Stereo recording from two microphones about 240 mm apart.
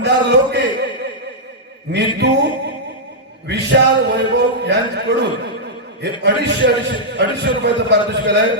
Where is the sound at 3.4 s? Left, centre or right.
Right.